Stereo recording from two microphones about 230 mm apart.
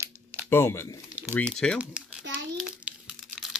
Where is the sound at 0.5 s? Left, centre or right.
Centre.